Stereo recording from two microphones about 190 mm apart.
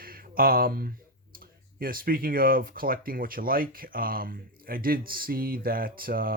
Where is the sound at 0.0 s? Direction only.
50° right (ahead or behind).